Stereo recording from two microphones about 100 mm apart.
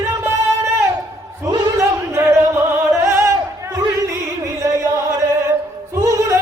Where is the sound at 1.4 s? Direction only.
35° right (ahead or behind).